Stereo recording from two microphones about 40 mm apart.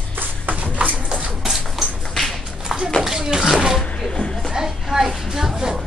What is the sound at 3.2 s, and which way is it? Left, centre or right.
Speech, centre.